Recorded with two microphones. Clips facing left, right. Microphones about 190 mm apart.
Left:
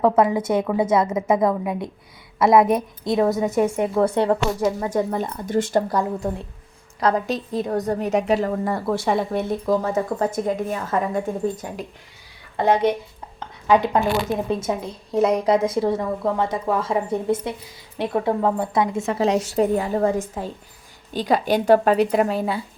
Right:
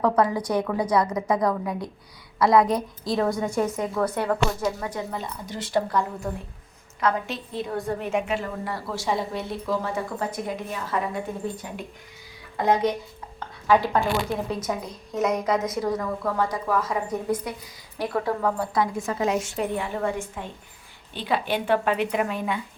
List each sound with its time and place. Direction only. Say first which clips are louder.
0.0 s speech: left 4 dB; 25° left (ahead or behind)
3.3 s a woman's voice: left 5 dB; 5° left (ahead or behind)
3.7 s speech: left 6 dB; 30° left (ahead or behind)
4.9 s a woman's voice: left 8 dB; 50° left (ahead or behind)
13.7 s a woman's voice: left 3 dB; 20° left (ahead or behind); by 22.6 s 35° left (ahead or behind)